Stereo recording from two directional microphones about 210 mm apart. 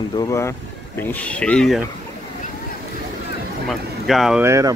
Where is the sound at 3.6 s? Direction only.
Centre (ahead or behind).